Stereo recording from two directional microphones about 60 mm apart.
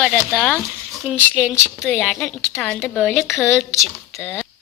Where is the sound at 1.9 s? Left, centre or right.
Centre.